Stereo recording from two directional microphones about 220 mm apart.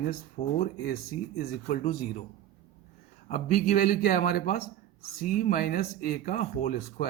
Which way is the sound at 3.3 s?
40° left (ahead or behind).